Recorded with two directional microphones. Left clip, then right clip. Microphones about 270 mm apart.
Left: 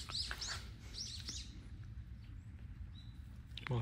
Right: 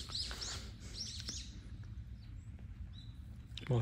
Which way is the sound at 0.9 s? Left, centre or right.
Right.